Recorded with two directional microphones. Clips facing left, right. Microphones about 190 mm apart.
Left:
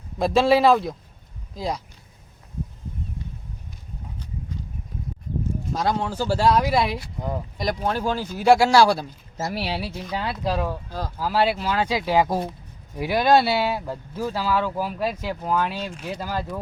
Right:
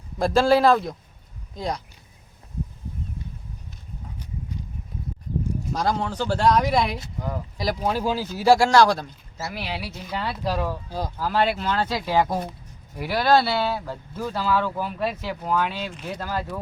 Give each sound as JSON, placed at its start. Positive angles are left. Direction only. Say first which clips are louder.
{"t": 0.2, "sound": "speech", "louder": "even", "side_deg": 0}
{"t": 5.7, "sound": "speech", "louder": "left 1 dB", "side_deg": 0}
{"t": 9.4, "sound": "speech", "louder": "left 4 dB", "side_deg": 35}
{"t": 9.9, "sound": "speech", "louder": "left 1 dB", "side_deg": 10}
{"t": 10.8, "sound": "speech", "louder": "right 2 dB", "side_deg": -15}
{"t": 11.2, "sound": "speech", "louder": "left 1 dB", "side_deg": 5}